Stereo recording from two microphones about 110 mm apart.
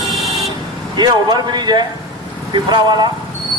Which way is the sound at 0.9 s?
40° right (ahead or behind).